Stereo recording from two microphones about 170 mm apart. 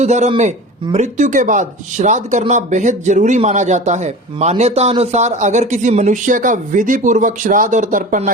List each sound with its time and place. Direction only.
0.0 s a man's voice: 40° right (ahead or behind)